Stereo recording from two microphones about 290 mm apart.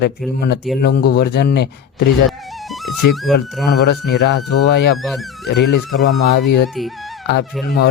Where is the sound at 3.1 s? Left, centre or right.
Centre.